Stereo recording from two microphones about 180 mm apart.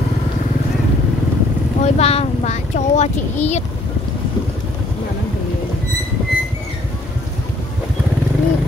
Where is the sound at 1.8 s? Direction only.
35° left (ahead or behind).